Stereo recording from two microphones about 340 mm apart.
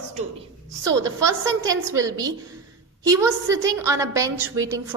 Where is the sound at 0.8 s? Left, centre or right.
Centre.